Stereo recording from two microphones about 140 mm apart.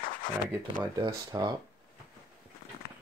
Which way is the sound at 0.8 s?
25° right (ahead or behind).